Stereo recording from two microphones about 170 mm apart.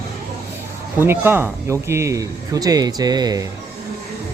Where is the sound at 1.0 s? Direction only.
15° right (ahead or behind).